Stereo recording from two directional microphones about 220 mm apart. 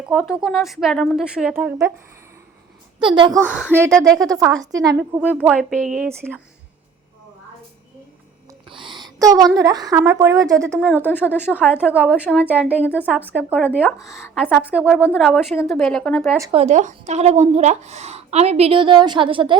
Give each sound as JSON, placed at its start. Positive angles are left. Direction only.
{"t": 0.1, "sound": "speech", "side_deg": 0}
{"t": 3.0, "sound": "speech", "side_deg": -20}
{"t": 3.4, "sound": "speech", "side_deg": -5}
{"t": 8.7, "sound": "a sound", "side_deg": -20}
{"t": 9.1, "sound": "speech", "side_deg": -15}
{"t": 13.6, "sound": "speech", "side_deg": 10}
{"t": 16.4, "sound": "speech", "side_deg": -25}